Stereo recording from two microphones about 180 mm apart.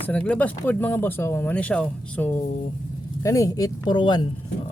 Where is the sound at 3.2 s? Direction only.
20° left (ahead or behind).